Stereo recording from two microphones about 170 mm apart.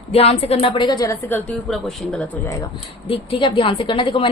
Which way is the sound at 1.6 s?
Centre (ahead or behind).